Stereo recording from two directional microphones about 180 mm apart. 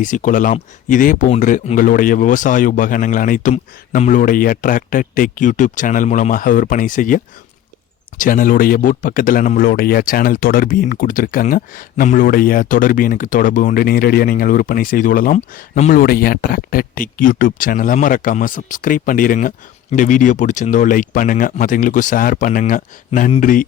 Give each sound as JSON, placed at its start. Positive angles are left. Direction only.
{"t": 0.0, "sound": "speech", "side_deg": 45}
{"t": 8.2, "sound": "speech", "side_deg": 50}